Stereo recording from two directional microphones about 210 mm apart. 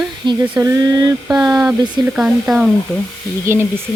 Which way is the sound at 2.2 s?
5° right (ahead or behind).